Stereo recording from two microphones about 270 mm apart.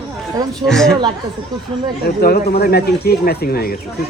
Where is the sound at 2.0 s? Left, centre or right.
Left.